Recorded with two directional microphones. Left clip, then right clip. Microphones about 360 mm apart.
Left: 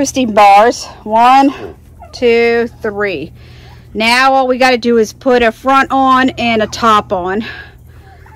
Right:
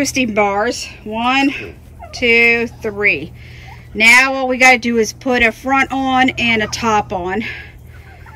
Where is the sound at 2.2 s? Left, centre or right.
Left.